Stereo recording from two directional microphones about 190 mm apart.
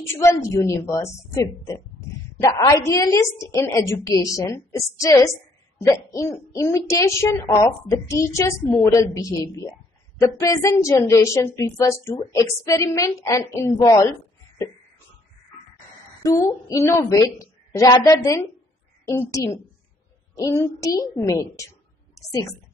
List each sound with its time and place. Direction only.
0.2 s speech: 15° left (ahead or behind)
16.2 s speech: 15° left (ahead or behind)